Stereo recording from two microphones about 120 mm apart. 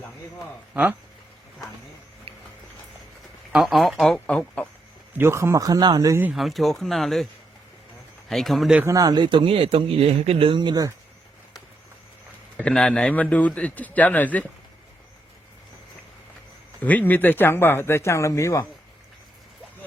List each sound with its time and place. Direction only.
0.7 s speech: 10° right (ahead or behind)
3.5 s speech: centre (ahead or behind)
5.1 s speech: 20° right (ahead or behind)
6.3 s speech: centre (ahead or behind)
8.3 s speech: centre (ahead or behind)
8.8 s speech: 30° right (ahead or behind)
12.6 s a man's voice: 5° left (ahead or behind)
16.8 s speech: 15° left (ahead or behind)